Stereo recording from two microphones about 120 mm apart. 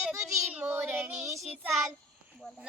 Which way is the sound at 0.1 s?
20° right (ahead or behind).